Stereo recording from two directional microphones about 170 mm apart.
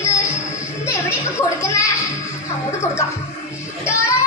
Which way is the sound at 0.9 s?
15° left (ahead or behind).